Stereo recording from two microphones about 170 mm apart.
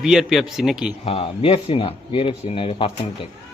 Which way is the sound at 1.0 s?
35° left (ahead or behind).